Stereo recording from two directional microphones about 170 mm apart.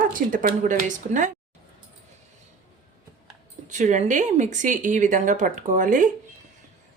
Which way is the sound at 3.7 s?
45° right (ahead or behind).